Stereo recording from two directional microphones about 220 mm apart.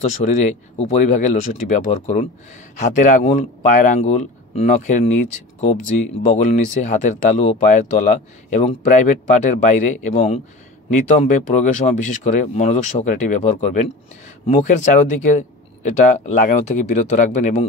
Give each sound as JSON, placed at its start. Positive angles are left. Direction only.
{"t": 0.2, "sound": "speech", "side_deg": 35}